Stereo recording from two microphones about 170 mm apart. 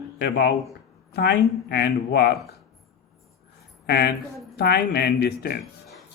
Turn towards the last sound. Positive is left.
turn(degrees=75)  # may be behind; listen again after turning